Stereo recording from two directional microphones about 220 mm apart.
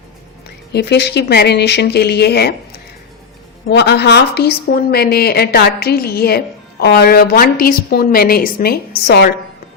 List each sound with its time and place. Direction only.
0.7 s a woman's voice: 50° left (ahead or behind)
3.7 s a woman's voice: 50° left (ahead or behind)